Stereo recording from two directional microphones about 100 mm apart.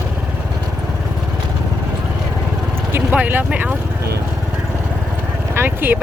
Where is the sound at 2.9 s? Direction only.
15° right (ahead or behind).